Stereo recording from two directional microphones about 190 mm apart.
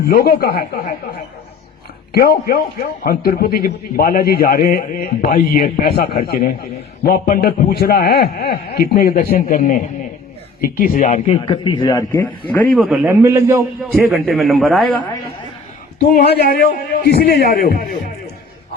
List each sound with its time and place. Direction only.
0.1 s a man's voice: 50° left (ahead or behind)
2.1 s a man's voice: 55° left (ahead or behind); by 12.9 s 5° left (ahead or behind)
12.9 s a man's voice: 10° right (ahead or behind)
13.9 s a man's voice: centre (ahead or behind)
16.0 s a man's voice: 50° left (ahead or behind)